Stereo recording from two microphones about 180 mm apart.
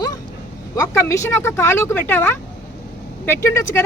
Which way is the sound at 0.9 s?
15° left (ahead or behind).